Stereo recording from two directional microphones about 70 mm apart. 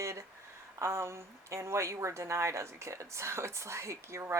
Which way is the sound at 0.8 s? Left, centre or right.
Right.